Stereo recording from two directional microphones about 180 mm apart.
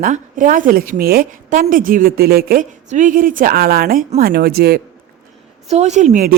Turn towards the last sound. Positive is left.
turn(degrees=-45)  # may be behind; listen again after turning